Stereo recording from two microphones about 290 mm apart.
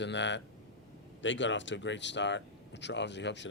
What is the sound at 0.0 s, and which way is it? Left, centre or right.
Speech, left.